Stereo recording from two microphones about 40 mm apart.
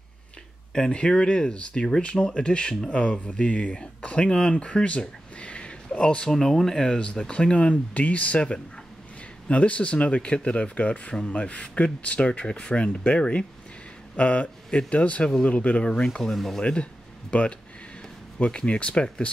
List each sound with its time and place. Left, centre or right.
0.7 s speech: left
5.4 s a sound: left
6.3 s speech: centre
7.0 s speech: left
14.1 s speech: left
14.7 s speech: left
15.8 s speech: left
16.1 s speech: centre
16.6 s speech: left